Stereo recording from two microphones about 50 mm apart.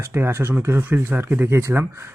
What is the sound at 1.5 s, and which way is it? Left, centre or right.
Speech, right.